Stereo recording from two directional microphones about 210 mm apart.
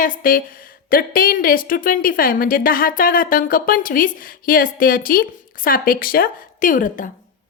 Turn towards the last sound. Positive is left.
turn(degrees=40)  # may be behind; listen again after turning